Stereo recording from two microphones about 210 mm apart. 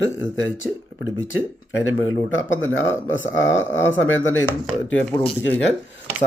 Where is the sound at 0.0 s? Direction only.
65° left (ahead or behind).